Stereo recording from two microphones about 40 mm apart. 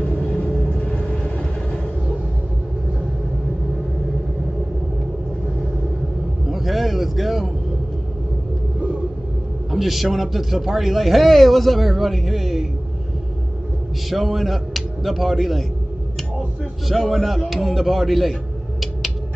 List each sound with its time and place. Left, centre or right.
0.0 s vehicle: left
6.5 s a sound: centre
9.7 s speech: centre
14.1 s speech: centre
16.8 s speech: centre